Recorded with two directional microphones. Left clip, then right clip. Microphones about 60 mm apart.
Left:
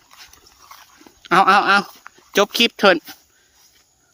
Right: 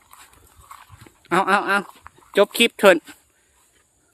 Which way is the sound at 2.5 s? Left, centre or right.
Left.